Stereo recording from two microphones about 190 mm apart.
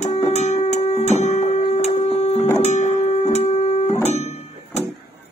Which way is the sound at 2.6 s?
35° left (ahead or behind).